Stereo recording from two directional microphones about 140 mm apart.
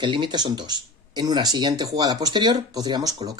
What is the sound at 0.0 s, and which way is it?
Speech, 35° right (ahead or behind).